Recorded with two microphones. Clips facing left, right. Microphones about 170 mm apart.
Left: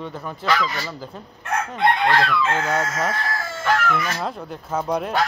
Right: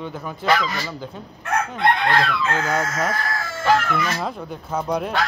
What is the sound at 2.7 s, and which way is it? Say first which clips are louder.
Speech: even; centre (ahead or behind).